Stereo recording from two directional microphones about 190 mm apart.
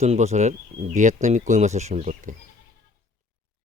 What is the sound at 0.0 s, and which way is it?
Speech, 35° right (ahead or behind).